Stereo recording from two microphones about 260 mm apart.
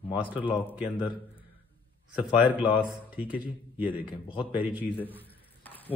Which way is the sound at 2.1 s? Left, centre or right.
Centre.